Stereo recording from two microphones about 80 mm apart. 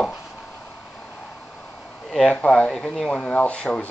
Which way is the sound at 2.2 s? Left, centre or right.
Centre.